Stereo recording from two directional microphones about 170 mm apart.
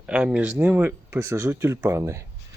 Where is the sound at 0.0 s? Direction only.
5° right (ahead or behind).